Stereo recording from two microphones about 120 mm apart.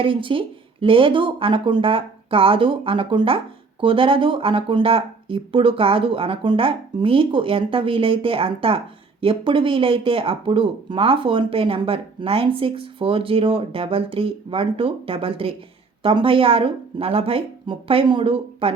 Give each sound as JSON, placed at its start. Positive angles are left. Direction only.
{"t": 0.0, "sound": "speech", "side_deg": -45}